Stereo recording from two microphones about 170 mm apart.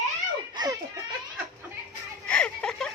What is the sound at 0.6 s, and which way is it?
Children playing, 25° right (ahead or behind).